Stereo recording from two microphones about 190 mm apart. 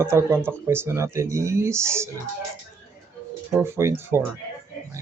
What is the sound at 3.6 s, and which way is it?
Speech, 15° right (ahead or behind).